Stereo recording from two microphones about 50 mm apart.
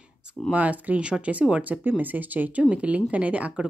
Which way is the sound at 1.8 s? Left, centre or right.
Right.